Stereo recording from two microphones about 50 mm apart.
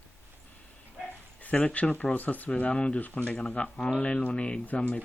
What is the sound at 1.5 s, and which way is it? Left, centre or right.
Speech, left.